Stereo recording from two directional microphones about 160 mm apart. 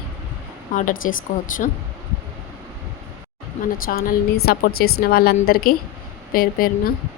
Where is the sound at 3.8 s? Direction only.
65° left (ahead or behind).